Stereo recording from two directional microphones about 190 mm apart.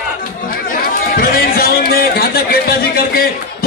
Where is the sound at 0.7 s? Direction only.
50° left (ahead or behind).